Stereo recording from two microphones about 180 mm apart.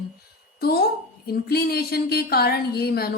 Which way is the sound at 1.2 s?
60° left (ahead or behind).